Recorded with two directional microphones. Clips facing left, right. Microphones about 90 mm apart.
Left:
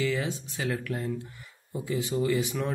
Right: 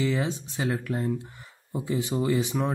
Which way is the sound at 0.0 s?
25° right (ahead or behind).